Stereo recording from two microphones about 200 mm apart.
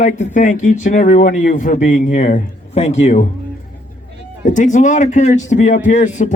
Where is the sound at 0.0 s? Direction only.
40° left (ahead or behind).